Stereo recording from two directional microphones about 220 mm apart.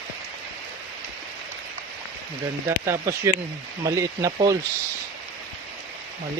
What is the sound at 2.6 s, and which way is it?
Speech, 10° right (ahead or behind).